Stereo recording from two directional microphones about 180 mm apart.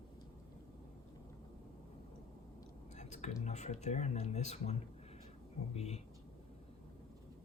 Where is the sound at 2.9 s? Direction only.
40° left (ahead or behind).